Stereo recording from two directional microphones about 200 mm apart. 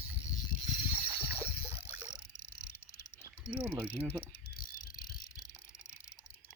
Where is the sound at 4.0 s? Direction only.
5° right (ahead or behind).